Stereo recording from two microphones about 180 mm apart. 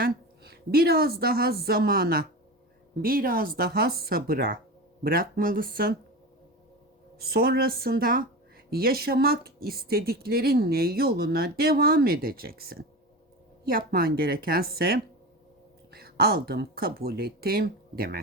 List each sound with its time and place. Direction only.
0.0 s a woman's voice: 60° right (ahead or behind)
7.2 s speech: 60° right (ahead or behind)